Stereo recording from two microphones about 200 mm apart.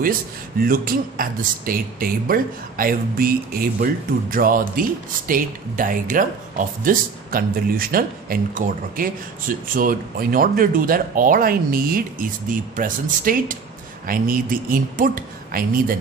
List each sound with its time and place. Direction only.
0.6 s speech: 45° right (ahead or behind)